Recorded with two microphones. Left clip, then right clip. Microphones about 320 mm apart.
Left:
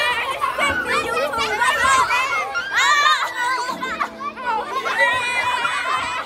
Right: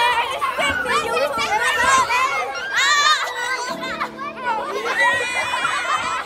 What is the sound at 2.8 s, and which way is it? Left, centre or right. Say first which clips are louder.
Music: even; centre.